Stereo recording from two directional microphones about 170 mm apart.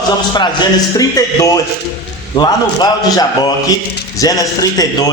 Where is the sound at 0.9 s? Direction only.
20° left (ahead or behind).